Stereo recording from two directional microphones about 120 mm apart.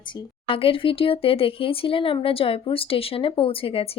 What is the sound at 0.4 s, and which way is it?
A woman's voice, 50° left (ahead or behind).